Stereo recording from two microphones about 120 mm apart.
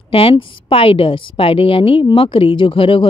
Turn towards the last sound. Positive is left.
turn(degrees=45)  # may be behind; listen again after turning